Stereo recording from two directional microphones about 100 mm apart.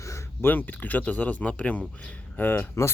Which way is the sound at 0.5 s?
15° left (ahead or behind).